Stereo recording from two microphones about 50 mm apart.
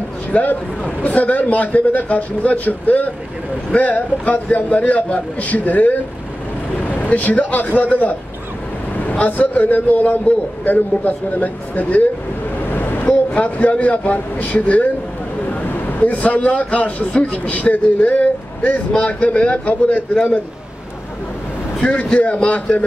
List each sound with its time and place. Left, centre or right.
0.3 s a man's voice: left
9.2 s a man's voice: left
12.7 s vehicle: left
13.3 s a man's voice: left
16.0 s a man's voice: left
21.8 s a man's voice: left